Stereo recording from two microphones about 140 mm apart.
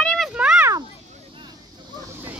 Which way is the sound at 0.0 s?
5° left (ahead or behind).